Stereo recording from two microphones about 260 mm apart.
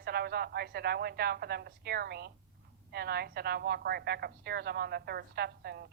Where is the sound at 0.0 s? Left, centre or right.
Right.